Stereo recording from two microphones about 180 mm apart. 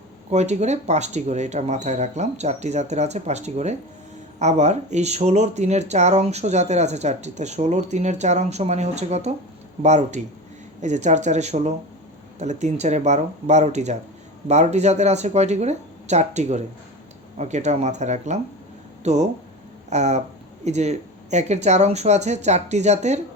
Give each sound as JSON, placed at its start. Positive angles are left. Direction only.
{"t": 0.3, "sound": "speech", "side_deg": -40}